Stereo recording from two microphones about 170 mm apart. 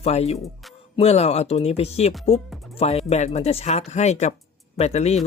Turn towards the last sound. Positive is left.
turn(degrees=40)  # may be behind; listen again after turning